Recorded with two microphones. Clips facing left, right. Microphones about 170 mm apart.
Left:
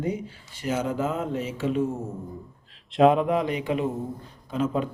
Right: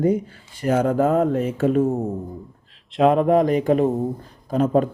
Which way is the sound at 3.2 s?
45° right (ahead or behind).